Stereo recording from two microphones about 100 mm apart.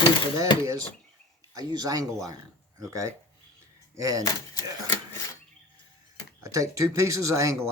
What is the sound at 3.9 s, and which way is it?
Speech, 35° right (ahead or behind).